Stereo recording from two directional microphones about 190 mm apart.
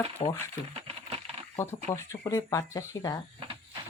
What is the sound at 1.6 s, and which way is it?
Speech, 15° left (ahead or behind).